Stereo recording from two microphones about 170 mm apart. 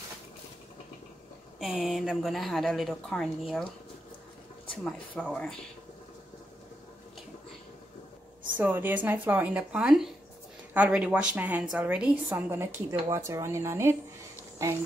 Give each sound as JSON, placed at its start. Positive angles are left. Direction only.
{"t": 1.6, "sound": "a woman's voice", "side_deg": 0}
{"t": 4.8, "sound": "a woman's voice", "side_deg": 5}
{"t": 8.5, "sound": "a woman's voice", "side_deg": -10}